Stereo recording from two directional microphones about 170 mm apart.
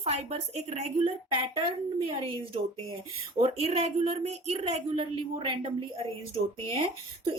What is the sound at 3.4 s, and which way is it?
A woman's voice, 35° right (ahead or behind).